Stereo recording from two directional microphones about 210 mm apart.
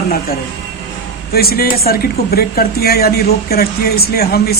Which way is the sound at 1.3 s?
45° left (ahead or behind).